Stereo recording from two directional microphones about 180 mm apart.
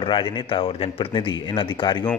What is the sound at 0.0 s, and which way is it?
A man's voice, 25° left (ahead or behind).